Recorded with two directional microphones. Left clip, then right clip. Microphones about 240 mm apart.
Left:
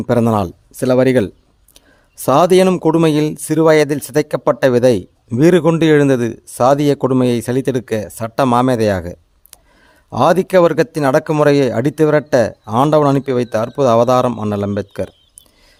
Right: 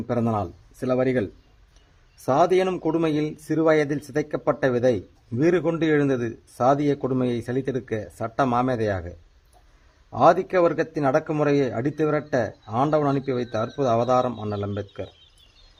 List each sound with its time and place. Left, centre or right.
0.1 s speech: left